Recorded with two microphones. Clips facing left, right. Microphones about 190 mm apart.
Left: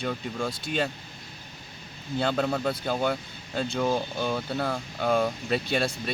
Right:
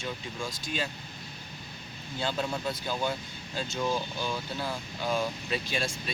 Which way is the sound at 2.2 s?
60° left (ahead or behind).